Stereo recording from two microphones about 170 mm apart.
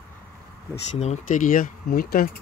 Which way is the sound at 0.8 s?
40° left (ahead or behind).